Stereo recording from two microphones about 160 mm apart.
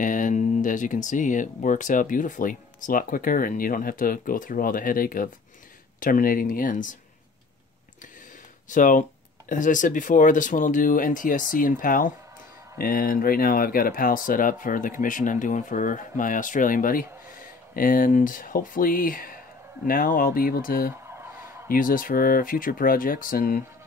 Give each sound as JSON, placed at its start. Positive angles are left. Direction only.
{"t": 0.0, "sound": "speech", "side_deg": 55}
{"t": 8.6, "sound": "speech", "side_deg": 55}
{"t": 20.9, "sound": "fowl", "side_deg": -15}
{"t": 21.6, "sound": "speech", "side_deg": 60}